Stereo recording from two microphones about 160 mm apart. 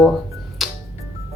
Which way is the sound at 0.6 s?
Centre (ahead or behind).